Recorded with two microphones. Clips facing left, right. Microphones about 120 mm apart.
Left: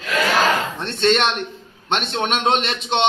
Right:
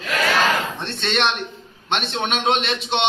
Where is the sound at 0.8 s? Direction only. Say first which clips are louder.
Left 6 dB; 40° left (ahead or behind).